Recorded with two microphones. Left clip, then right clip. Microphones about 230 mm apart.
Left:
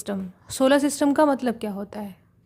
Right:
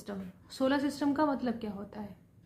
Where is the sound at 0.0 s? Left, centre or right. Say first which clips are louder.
Left 11 dB; left.